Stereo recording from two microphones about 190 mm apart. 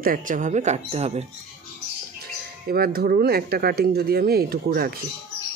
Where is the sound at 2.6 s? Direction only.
55° right (ahead or behind).